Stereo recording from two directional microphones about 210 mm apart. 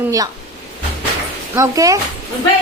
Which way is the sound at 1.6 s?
15° right (ahead or behind).